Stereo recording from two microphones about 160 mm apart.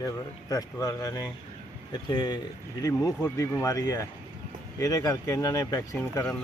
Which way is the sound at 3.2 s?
15° left (ahead or behind).